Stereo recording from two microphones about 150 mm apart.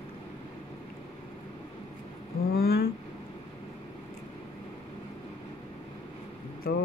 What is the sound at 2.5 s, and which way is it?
Vehicle, 90° left.